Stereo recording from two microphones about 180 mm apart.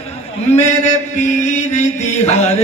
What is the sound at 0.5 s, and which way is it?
Speech, 40° left (ahead or behind).